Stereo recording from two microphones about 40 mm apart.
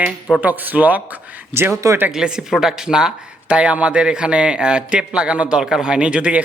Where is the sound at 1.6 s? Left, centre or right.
Right.